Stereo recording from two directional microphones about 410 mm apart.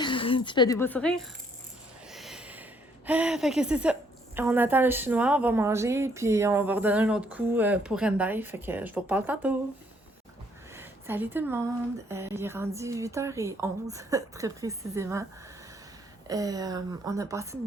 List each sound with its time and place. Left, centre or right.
0.0 s a woman's voice: centre
2.0 s a sound: centre
3.1 s a woman's voice: centre
10.8 s a woman's voice: centre